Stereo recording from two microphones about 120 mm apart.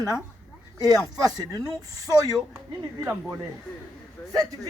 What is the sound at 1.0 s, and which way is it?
Speech, 30° right (ahead or behind).